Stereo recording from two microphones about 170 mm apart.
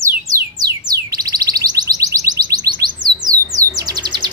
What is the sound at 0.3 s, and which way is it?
Music, 20° right (ahead or behind).